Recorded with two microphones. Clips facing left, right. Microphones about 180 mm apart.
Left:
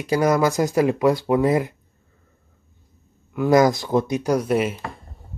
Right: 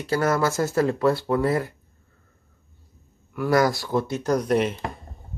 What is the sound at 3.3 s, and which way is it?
Speech, 20° left (ahead or behind).